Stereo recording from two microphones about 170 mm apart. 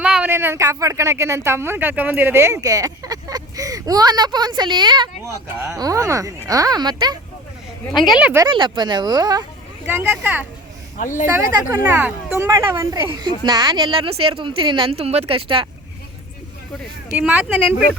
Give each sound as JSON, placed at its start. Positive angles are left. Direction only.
{"t": 0.0, "sound": "speech", "side_deg": -5}
{"t": 7.9, "sound": "speech", "side_deg": 0}
{"t": 8.4, "sound": "speech", "side_deg": -30}
{"t": 9.8, "sound": "speech", "side_deg": -10}
{"t": 11.7, "sound": "speech", "side_deg": -15}
{"t": 17.2, "sound": "speech", "side_deg": -10}